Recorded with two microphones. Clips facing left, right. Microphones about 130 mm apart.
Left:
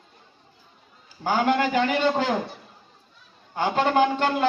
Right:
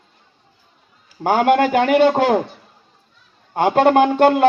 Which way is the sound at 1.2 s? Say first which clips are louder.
Right 7 dB; 65° right (ahead or behind).